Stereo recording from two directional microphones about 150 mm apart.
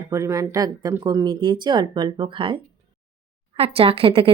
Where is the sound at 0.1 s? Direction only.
20° right (ahead or behind).